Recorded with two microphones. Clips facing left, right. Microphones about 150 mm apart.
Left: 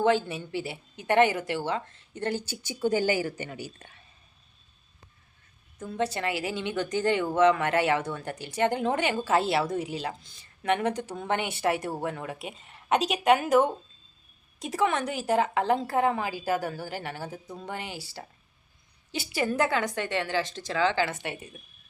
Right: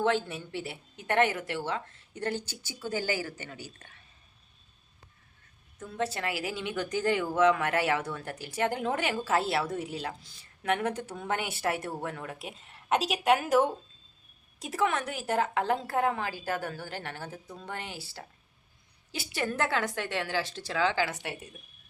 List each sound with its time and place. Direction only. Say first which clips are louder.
0.0 s speech: left 4 dB; centre (ahead or behind)
2.4 s a woman's voice: left 10 dB; 15° left (ahead or behind)
5.8 s speech: left 3 dB; centre (ahead or behind)
19.1 s speech: left 5 dB; centre (ahead or behind)